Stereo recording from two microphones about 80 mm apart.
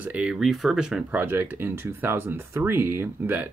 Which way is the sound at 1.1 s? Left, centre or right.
Right.